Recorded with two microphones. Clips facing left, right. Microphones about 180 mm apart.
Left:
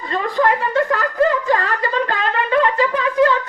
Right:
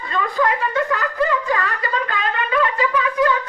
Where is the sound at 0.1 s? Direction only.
40° left (ahead or behind).